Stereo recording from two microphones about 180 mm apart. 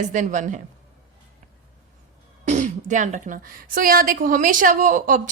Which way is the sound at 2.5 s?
40° right (ahead or behind).